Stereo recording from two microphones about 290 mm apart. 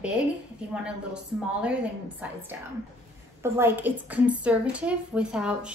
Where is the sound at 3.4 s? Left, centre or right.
Centre.